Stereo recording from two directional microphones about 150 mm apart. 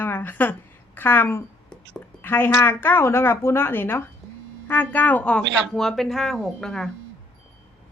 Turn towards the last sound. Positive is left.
turn(degrees=5)  # may be behind; listen again after turning